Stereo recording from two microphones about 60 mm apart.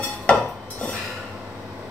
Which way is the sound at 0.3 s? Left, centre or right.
Left.